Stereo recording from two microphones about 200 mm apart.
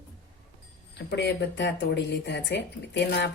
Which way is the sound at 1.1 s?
60° left (ahead or behind).